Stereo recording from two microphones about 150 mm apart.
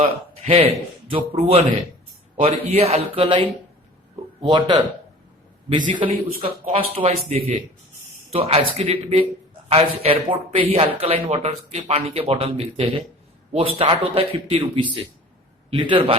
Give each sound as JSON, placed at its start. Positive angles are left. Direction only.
{"t": 0.0, "sound": "a man's voice", "side_deg": -40}
{"t": 2.6, "sound": "speech", "side_deg": -45}
{"t": 4.4, "sound": "speech", "side_deg": -30}
{"t": 6.4, "sound": "speech", "side_deg": -35}